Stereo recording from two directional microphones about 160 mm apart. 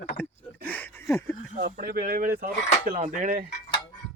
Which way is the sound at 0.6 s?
10° left (ahead or behind).